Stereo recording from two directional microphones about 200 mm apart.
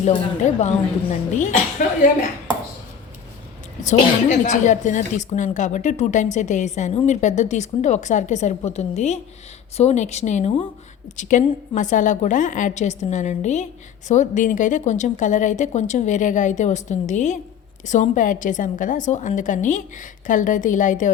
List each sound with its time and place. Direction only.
0.0 s speech: 35° left (ahead or behind)
3.8 s speech: 35° left (ahead or behind)